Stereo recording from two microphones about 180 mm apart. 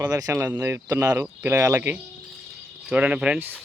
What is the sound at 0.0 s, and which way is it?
Speech, 20° right (ahead or behind).